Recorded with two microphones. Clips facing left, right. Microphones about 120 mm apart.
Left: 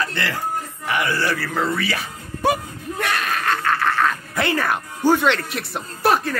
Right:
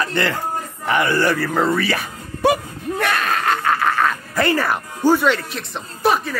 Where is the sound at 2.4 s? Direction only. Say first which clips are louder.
Right 3 dB; 90° right.